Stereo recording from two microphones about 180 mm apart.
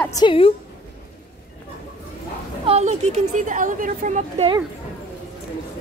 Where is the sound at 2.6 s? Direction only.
35° right (ahead or behind).